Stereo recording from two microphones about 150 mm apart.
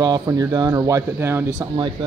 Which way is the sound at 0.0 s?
25° right (ahead or behind).